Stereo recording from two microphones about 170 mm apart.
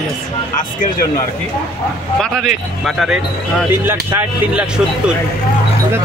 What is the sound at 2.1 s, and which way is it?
Speech, centre (ahead or behind).